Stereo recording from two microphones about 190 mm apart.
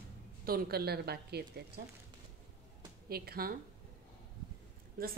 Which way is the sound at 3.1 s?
55° right (ahead or behind).